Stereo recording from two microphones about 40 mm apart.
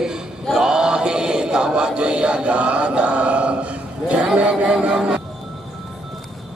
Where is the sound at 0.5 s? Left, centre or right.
Centre.